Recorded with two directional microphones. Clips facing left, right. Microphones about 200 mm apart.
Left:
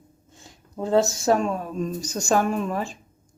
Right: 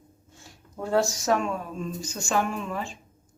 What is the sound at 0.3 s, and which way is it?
Speech, 20° left (ahead or behind).